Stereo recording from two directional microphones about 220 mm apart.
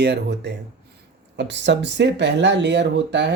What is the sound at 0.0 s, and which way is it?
Speech, 50° right (ahead or behind).